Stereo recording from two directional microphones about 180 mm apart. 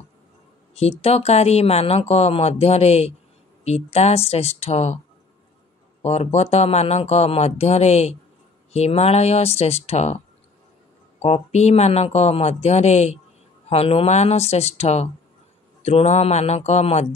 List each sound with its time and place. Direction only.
0.7 s speech: 35° left (ahead or behind)
6.0 s speech: 35° left (ahead or behind)
11.1 s speech: 35° left (ahead or behind)